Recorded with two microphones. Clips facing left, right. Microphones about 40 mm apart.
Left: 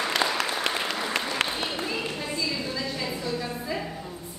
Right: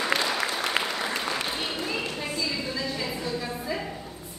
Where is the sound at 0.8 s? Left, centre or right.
Right.